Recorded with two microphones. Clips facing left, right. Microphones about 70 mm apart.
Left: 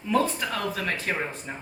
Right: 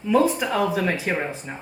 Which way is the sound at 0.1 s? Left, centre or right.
Centre.